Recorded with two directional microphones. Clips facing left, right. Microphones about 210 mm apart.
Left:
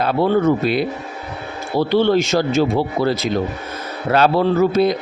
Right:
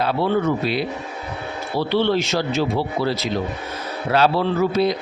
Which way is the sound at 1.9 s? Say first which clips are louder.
Left 4 dB; 45° left (ahead or behind).